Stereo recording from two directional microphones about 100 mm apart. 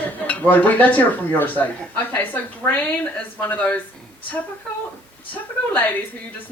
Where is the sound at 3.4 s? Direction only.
20° left (ahead or behind).